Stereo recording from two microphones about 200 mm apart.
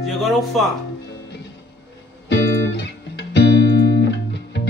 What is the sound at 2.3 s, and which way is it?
Music, 70° left (ahead or behind).